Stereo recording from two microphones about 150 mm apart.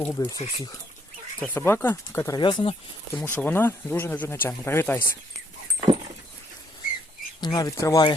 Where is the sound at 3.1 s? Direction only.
10° left (ahead or behind).